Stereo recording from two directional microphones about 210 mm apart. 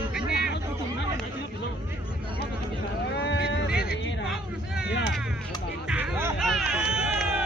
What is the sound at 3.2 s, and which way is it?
Boat, 55° left (ahead or behind).